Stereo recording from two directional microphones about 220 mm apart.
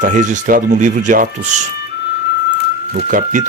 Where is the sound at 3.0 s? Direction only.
40° right (ahead or behind).